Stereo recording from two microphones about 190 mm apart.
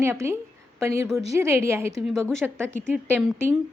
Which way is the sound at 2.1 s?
Centre (ahead or behind).